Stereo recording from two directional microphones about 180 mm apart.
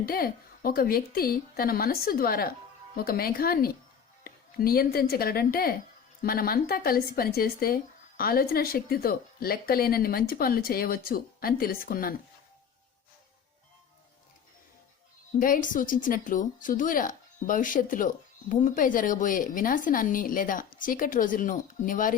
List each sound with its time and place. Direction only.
0.0 s speech: 55° left (ahead or behind)
15.4 s speech: 50° left (ahead or behind)